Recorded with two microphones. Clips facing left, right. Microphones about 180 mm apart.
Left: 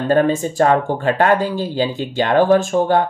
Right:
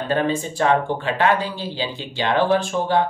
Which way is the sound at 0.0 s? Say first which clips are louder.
Left 6 dB; 45° left (ahead or behind).